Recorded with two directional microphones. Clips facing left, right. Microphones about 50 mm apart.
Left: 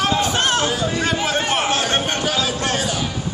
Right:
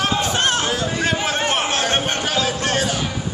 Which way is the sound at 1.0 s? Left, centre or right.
Right.